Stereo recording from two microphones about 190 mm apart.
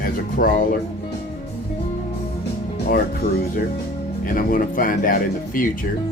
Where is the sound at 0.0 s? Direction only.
50° left (ahead or behind).